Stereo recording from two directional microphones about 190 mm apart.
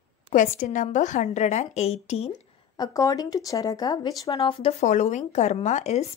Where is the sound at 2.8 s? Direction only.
15° left (ahead or behind).